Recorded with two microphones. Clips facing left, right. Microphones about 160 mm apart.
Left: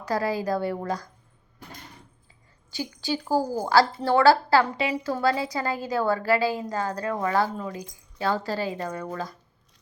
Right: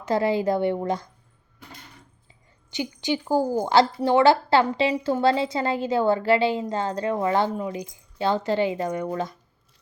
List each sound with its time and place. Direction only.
0.0 s a woman's voice: 25° right (ahead or behind)
2.6 s a woman's voice: 20° right (ahead or behind)